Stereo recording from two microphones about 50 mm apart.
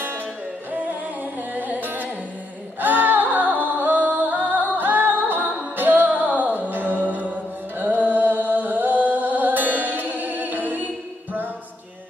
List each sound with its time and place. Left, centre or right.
1.2 s music: right